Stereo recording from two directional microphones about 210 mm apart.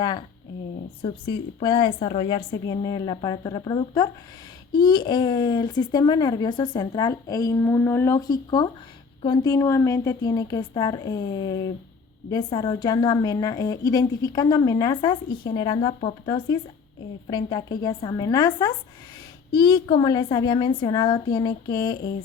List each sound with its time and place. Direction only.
1.0 s a woman's voice: 25° left (ahead or behind)